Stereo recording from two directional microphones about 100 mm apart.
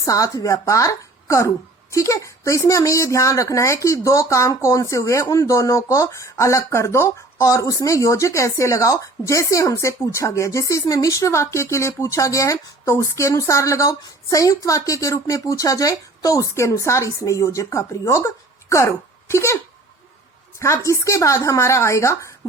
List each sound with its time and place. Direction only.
0.0 s a woman's voice: 35° left (ahead or behind)
20.6 s speech: 30° left (ahead or behind)